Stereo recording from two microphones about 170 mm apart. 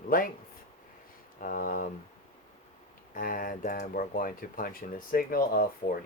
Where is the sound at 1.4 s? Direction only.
55° left (ahead or behind).